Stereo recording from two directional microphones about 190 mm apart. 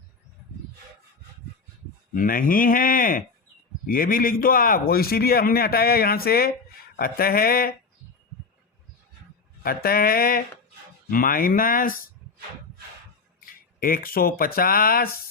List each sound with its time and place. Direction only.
2.1 s a man's voice: 50° left (ahead or behind)
9.6 s a man's voice: 50° left (ahead or behind)
13.4 s speech: 50° left (ahead or behind)